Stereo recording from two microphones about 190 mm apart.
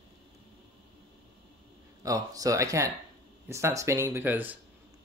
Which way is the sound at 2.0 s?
20° right (ahead or behind).